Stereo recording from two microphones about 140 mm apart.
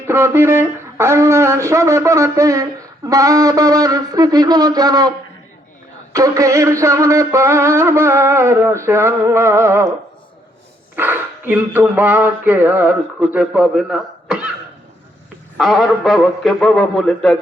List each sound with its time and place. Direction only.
0.1 s speech: 15° right (ahead or behind)
6.1 s speech: 25° right (ahead or behind)
10.9 s a sound: 15° right (ahead or behind)
15.5 s a man's voice: centre (ahead or behind)